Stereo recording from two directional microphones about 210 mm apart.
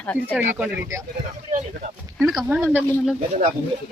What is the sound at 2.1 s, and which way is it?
A woman's voice, centre (ahead or behind).